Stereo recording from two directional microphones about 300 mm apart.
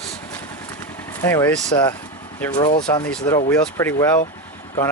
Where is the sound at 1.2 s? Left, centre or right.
Centre.